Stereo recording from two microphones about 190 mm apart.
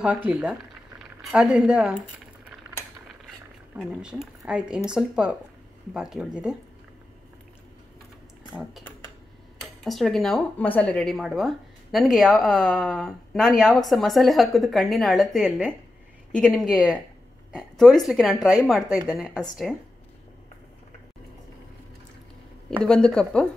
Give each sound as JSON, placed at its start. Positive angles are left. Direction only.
{"t": 0.0, "sound": "speech", "side_deg": -5}
{"t": 3.7, "sound": "speech", "side_deg": -5}
{"t": 9.8, "sound": "speech", "side_deg": 0}
{"t": 22.7, "sound": "speech", "side_deg": 5}